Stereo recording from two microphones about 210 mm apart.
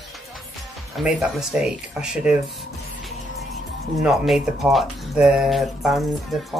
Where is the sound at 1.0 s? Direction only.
Centre (ahead or behind).